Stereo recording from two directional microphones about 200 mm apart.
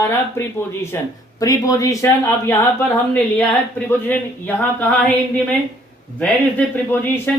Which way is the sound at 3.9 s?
10° left (ahead or behind).